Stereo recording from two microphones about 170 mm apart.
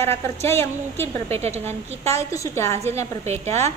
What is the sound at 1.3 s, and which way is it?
Speech, 40° right (ahead or behind).